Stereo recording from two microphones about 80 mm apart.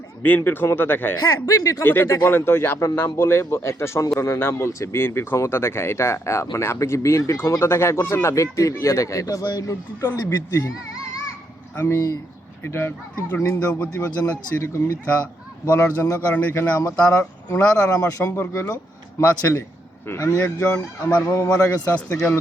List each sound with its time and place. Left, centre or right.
0.2 s speech: left
1.2 s speech: left
1.8 s speech: left
10.0 s speech: left
11.8 s speech: left
13.6 s a man's voice: centre
16.2 s speech: left
16.7 s speech: left; by 21.2 s centre
21.2 s speech: left